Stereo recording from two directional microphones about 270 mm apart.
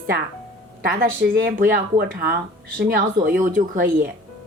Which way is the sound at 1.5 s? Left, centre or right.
Right.